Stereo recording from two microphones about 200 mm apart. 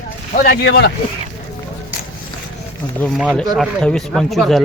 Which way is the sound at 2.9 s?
5° left (ahead or behind).